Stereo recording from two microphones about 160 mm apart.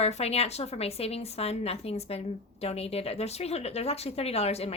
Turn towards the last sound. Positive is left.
turn(degrees=40)  # may be behind; listen again after turning